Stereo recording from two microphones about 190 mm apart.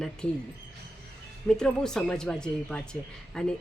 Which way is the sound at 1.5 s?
5° left (ahead or behind).